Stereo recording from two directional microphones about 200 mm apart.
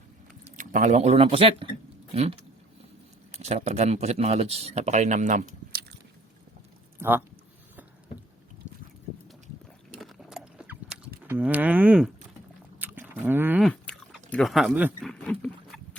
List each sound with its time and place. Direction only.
0.4 s speech: 40° right (ahead or behind)
3.3 s speech: 35° right (ahead or behind)
7.0 s speech: 10° right (ahead or behind)
10.0 s a sound: centre (ahead or behind)
11.3 s speech: 10° right (ahead or behind)
12.8 s livestock: 10° right (ahead or behind)
13.7 s a sound: centre (ahead or behind)
15.1 s rowboat: 5° left (ahead or behind)